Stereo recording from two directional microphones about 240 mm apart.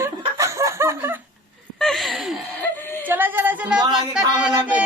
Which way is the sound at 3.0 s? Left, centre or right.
Centre.